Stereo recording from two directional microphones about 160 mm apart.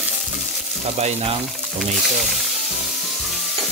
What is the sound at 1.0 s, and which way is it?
Speech, 40° right (ahead or behind).